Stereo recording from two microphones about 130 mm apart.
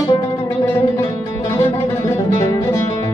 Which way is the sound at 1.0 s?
20° left (ahead or behind).